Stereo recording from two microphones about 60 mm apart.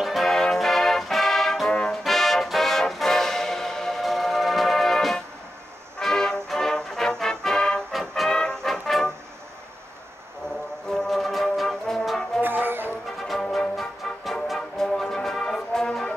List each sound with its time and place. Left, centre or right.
0.0 s brass instrument: centre
2.0 s music: centre
10.9 s brass instrument: centre
12.4 s music: right
13.3 s music: centre